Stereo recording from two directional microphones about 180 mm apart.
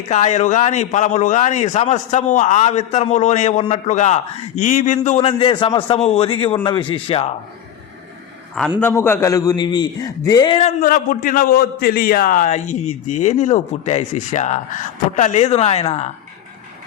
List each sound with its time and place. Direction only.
0.1 s a man's voice: 40° left (ahead or behind)
8.8 s a man's voice: 15° left (ahead or behind)
10.6 s a man's voice: 50° left (ahead or behind)